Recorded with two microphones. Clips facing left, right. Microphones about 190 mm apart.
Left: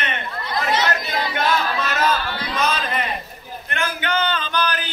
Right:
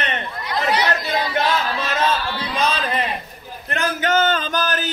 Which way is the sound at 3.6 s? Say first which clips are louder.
Right 4 dB; 40° right (ahead or behind).